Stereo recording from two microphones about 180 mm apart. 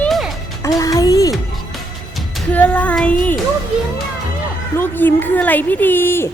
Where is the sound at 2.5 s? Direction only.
10° left (ahead or behind).